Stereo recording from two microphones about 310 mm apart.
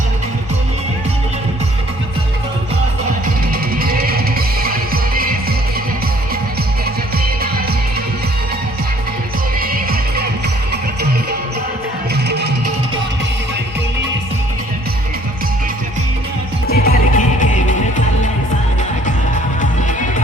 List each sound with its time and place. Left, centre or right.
3.5 s music: right
9.6 s music: right
16.6 s music: left